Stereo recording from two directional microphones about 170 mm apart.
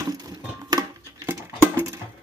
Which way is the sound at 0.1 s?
20° right (ahead or behind).